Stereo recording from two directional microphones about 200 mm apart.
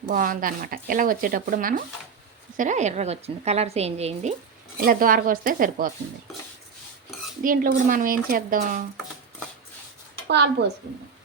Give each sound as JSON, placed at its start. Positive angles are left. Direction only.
{"t": 0.1, "sound": "a woman's voice", "side_deg": -45}
{"t": 4.8, "sound": "speech", "side_deg": -45}
{"t": 7.4, "sound": "speech", "side_deg": -45}
{"t": 10.2, "sound": "speech", "side_deg": -60}